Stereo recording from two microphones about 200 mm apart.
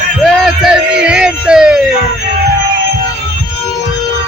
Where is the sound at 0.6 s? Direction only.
5° right (ahead or behind).